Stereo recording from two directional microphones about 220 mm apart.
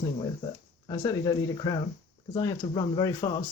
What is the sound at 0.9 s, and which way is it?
Speech, 20° left (ahead or behind).